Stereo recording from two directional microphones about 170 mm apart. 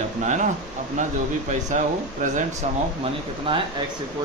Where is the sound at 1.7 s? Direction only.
50° right (ahead or behind).